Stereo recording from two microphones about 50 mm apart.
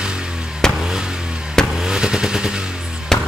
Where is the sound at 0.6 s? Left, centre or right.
Centre.